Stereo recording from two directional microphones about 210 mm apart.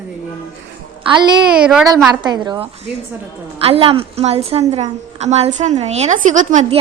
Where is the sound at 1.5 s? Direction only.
5° right (ahead or behind).